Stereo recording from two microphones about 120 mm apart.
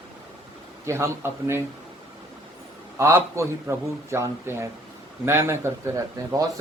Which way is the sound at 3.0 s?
25° right (ahead or behind).